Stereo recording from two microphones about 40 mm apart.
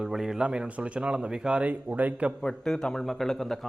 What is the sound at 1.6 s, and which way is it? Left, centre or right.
Speech, right.